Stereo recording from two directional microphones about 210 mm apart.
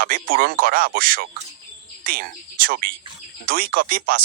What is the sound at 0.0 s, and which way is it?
Speech, 45° right (ahead or behind).